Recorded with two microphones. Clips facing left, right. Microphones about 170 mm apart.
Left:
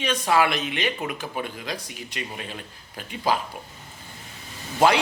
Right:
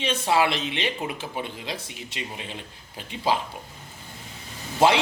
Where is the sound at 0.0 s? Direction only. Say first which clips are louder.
Left 1 dB; 25° right (ahead or behind).